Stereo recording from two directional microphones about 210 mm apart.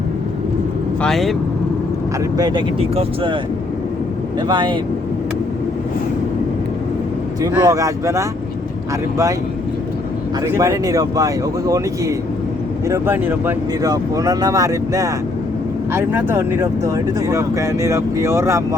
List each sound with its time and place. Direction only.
1.0 s speech: centre (ahead or behind)
2.4 s speech: 20° right (ahead or behind)
4.4 s speech: 20° right (ahead or behind)
7.5 s speech: 15° right (ahead or behind)
10.4 s speech: 15° right (ahead or behind)